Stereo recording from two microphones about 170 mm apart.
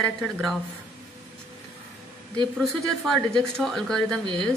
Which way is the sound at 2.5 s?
Centre (ahead or behind).